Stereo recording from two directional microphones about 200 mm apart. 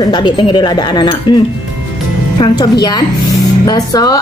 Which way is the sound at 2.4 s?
20° left (ahead or behind).